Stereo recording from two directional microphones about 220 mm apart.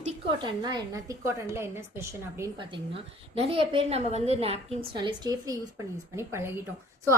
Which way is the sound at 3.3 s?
25° right (ahead or behind).